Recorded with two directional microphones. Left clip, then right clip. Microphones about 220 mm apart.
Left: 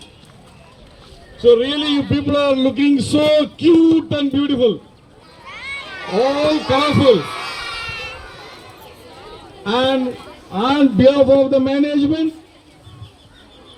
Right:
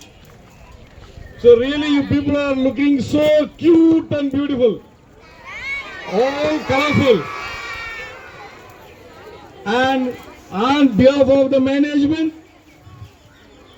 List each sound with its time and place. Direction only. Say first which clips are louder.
1.4 s a man's voice: right 1 dB; 45° left (ahead or behind)
5.5 s a sound: right 3 dB; 40° right (ahead or behind)
6.1 s a man's voice: left 2 dB; 35° left (ahead or behind)
9.6 s a man's voice: even; 15° right (ahead or behind)
10.5 s a man's voice: even; 30° right (ahead or behind)